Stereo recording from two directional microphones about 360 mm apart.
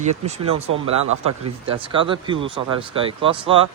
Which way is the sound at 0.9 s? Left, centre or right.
Right.